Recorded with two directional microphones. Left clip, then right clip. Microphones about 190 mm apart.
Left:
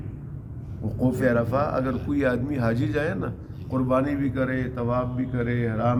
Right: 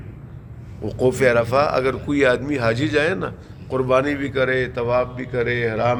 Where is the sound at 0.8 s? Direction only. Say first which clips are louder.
Right 7 dB; 35° right (ahead or behind).